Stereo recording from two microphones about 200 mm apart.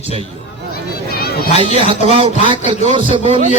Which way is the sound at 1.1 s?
50° left (ahead or behind).